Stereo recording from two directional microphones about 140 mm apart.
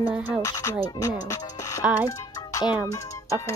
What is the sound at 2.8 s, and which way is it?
Speech, 25° left (ahead or behind).